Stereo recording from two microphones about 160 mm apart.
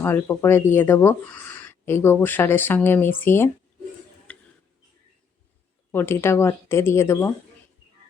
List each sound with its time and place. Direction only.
0.0 s speech: 15° left (ahead or behind)
4.3 s a sound: 10° left (ahead or behind)
5.9 s speech: 15° left (ahead or behind)